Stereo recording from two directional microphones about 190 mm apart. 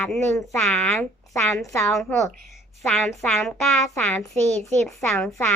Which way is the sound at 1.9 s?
Centre (ahead or behind).